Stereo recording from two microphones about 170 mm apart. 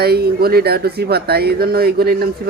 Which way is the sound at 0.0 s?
70° right (ahead or behind).